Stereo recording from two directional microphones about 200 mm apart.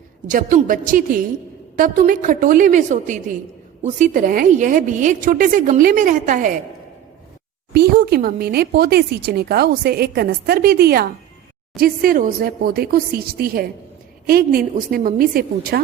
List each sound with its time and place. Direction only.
0.3 s a woman's voice: 40° right (ahead or behind)
7.7 s speech: 50° right (ahead or behind)